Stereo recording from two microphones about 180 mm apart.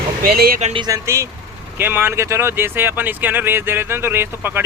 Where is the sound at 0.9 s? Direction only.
15° right (ahead or behind).